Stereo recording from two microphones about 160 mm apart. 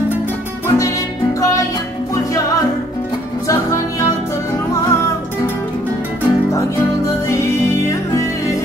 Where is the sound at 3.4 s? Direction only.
20° left (ahead or behind).